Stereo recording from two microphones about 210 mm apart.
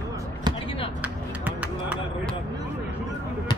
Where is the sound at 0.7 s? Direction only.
25° left (ahead or behind).